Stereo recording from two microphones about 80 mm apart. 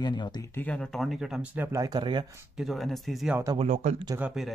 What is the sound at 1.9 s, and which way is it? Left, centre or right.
Speech, right.